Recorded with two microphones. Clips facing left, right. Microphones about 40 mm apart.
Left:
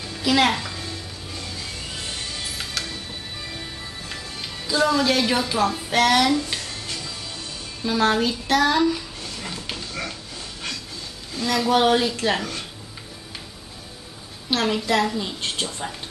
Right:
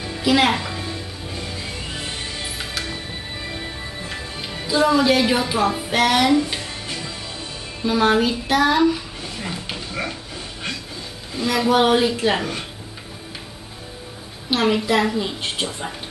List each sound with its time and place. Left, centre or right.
0.0 s music: centre
7.8 s a sound: centre
11.3 s a woman's voice: centre
14.5 s a woman's voice: centre